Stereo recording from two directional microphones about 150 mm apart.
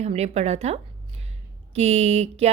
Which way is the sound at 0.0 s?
45° right (ahead or behind).